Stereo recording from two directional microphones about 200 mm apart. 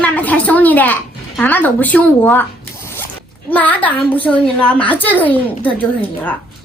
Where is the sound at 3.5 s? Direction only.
5° left (ahead or behind).